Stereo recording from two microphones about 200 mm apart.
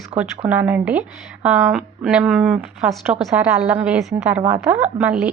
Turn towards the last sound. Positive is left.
turn(degrees=-5)  # may be behind; listen again after turning